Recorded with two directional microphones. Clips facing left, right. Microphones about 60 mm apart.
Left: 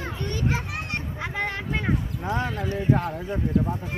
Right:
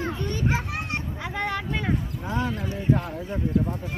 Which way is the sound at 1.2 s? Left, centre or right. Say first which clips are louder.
Right 1 dB; left.